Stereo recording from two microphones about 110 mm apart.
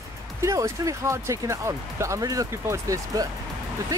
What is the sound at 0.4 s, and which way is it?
Speech, 30° right (ahead or behind).